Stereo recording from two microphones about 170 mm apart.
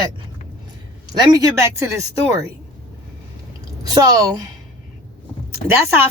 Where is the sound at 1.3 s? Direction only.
15° right (ahead or behind).